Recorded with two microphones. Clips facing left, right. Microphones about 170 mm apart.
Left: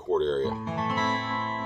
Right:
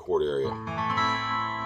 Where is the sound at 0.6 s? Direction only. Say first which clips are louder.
Left 2 dB; 25° left (ahead or behind).